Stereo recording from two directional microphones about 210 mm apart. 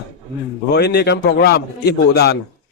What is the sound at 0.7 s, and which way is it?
A man's voice, 50° left (ahead or behind).